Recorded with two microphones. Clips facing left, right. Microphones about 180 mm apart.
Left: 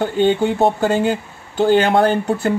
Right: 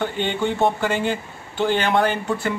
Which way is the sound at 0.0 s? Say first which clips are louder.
Left 7 dB; 40° left (ahead or behind).